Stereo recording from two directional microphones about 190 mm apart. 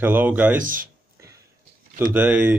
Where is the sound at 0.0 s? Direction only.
10° right (ahead or behind).